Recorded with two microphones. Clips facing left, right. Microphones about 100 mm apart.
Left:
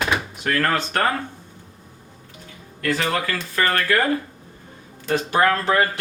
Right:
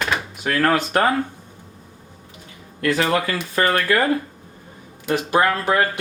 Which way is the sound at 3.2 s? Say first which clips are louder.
Right 2 dB; 20° right (ahead or behind).